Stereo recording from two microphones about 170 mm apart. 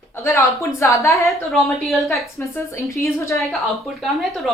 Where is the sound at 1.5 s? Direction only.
Centre (ahead or behind).